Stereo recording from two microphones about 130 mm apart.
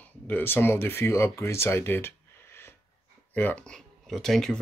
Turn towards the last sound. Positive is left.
turn(degrees=5)  # may be behind; listen again after turning